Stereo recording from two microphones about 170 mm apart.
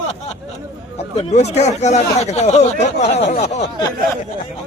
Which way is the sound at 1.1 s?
40° left (ahead or behind).